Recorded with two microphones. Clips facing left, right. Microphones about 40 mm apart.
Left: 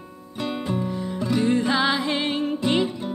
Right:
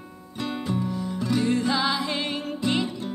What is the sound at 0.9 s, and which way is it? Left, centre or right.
Music, left.